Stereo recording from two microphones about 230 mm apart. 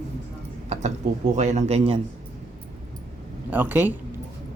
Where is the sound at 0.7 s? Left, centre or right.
Right.